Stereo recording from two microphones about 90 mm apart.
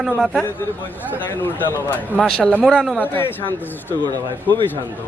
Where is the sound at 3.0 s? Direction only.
25° left (ahead or behind).